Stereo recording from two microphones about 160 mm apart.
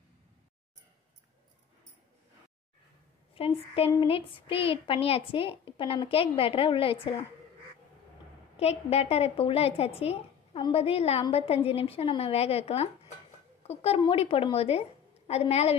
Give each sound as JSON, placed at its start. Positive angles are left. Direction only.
{"t": 3.3, "sound": "a woman's voice", "side_deg": 35}
{"t": 8.5, "sound": "a woman's voice", "side_deg": 40}